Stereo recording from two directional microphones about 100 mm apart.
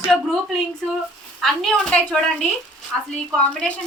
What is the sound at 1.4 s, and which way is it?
Speech, 5° left (ahead or behind).